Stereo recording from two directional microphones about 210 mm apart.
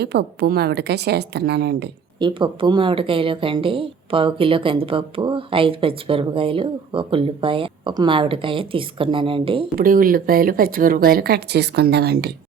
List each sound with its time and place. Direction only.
0.0 s speech: 50° right (ahead or behind)
2.1 s speech: 20° right (ahead or behind)
9.7 s speech: 40° right (ahead or behind)